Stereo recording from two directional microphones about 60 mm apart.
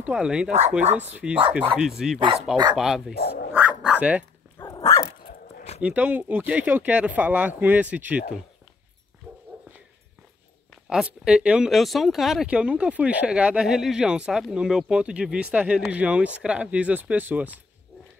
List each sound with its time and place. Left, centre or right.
0.0 s speech: centre
1.9 s speech: centre
3.9 s speech: right
5.8 s speech: right
9.3 s dog: right
11.1 s speech: centre
11.7 s speech: centre
12.4 s speech: centre